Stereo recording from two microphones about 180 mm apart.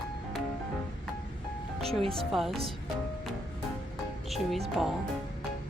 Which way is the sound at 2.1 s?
Centre (ahead or behind).